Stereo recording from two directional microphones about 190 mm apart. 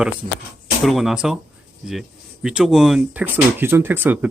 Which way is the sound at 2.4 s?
5° right (ahead or behind).